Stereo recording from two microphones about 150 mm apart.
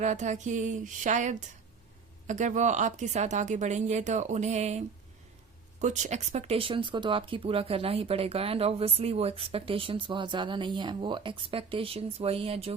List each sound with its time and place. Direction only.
0.0 s a sound: 55° right (ahead or behind)
2.2 s speech: 55° right (ahead or behind)
5.8 s speech: 50° right (ahead or behind)